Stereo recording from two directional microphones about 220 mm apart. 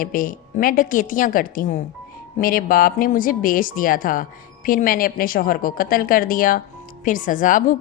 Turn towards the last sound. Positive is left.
turn(degrees=35)  # may be behind; listen again after turning